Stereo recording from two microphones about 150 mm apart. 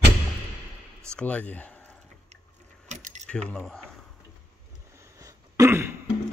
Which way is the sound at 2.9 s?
50° right (ahead or behind).